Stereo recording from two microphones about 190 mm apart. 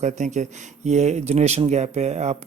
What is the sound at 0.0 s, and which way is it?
Speech, 40° right (ahead or behind).